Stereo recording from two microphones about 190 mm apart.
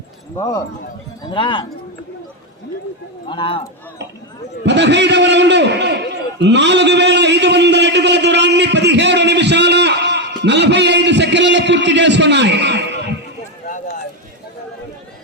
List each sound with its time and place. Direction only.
0.3 s speech: 15° left (ahead or behind)
3.2 s speech: 25° left (ahead or behind)
4.6 s a man's voice: 65° right (ahead or behind)
13.7 s a sound: 40° left (ahead or behind)